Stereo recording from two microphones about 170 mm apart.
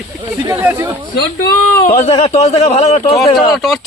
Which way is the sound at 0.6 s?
15° right (ahead or behind).